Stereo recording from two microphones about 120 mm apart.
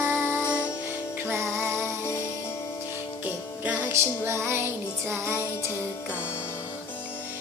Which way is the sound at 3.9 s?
20° right (ahead or behind).